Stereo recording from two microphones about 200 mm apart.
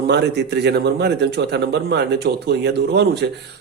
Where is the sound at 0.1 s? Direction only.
55° right (ahead or behind).